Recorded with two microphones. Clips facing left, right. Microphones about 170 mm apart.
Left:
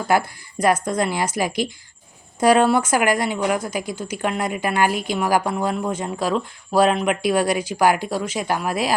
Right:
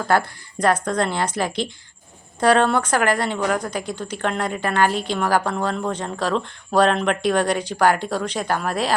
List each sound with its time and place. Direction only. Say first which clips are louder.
0.1 s speech: left 1 dB; 10° left (ahead or behind)